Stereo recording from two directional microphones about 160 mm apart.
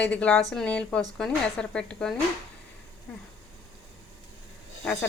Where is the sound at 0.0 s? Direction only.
5° left (ahead or behind).